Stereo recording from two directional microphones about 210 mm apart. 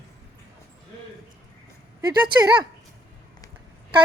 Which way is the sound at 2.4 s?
20° right (ahead or behind).